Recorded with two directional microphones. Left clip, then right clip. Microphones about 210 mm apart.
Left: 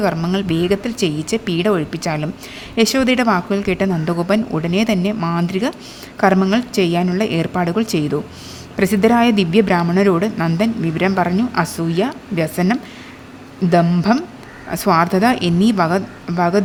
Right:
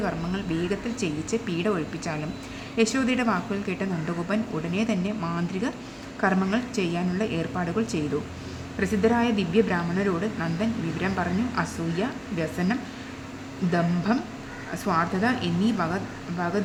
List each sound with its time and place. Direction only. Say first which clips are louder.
0.0 s a woman's voice: left 11 dB; 45° left (ahead or behind)